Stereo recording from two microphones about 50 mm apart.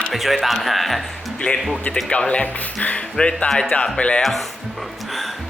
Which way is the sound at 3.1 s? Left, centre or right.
Centre.